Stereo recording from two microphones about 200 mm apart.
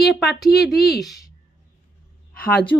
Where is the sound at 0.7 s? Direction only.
50° left (ahead or behind).